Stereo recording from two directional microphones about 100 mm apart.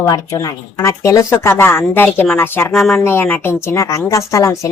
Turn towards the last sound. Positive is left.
turn(degrees=30)  # may be behind; listen again after turning